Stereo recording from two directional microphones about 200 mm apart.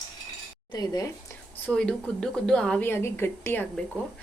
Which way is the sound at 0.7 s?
20° left (ahead or behind).